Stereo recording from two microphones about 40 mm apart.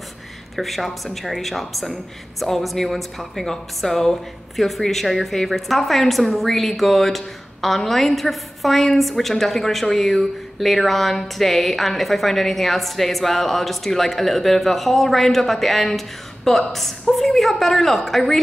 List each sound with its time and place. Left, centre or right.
0.6 s a woman's voice: centre